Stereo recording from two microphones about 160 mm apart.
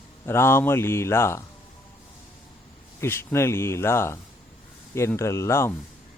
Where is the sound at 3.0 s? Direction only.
15° left (ahead or behind).